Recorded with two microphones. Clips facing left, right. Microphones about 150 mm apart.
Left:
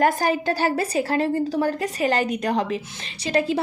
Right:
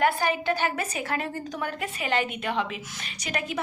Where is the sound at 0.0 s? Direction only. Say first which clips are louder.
Left 4 dB; 40° left (ahead or behind).